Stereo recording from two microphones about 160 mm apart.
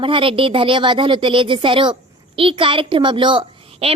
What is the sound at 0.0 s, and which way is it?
Speech, 35° right (ahead or behind).